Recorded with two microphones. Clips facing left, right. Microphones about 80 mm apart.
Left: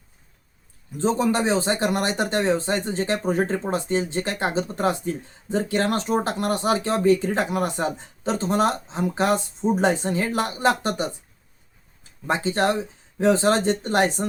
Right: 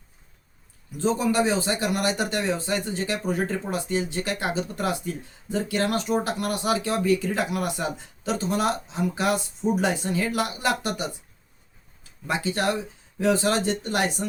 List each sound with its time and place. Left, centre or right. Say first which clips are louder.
0.9 s speech: left 2 dB; left
12.3 s speech: left 3 dB; left